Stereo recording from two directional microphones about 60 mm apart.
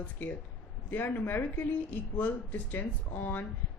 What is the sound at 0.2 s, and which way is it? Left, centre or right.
A woman's voice, left.